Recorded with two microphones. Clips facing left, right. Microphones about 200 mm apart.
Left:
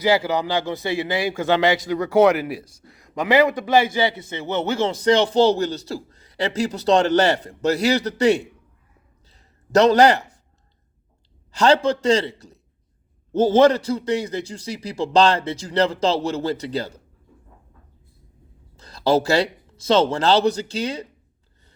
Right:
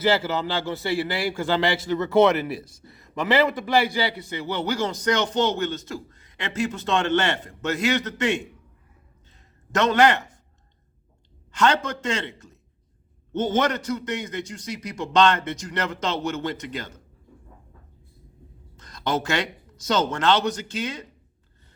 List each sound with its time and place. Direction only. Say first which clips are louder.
0.0 s a man's voice: left 3 dB; 15° left (ahead or behind); by 8.4 s 35° left (ahead or behind)
9.3 s a sound: left 9 dB; 35° left (ahead or behind)
11.5 s a man's voice: left 5 dB; 35° left (ahead or behind)
18.8 s speech: left 8 dB; 30° left (ahead or behind)